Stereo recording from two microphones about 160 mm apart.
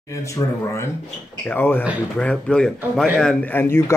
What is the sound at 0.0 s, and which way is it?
Speech, 20° left (ahead or behind).